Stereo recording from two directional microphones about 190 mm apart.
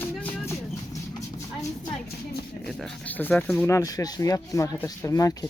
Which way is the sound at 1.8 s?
55° left (ahead or behind).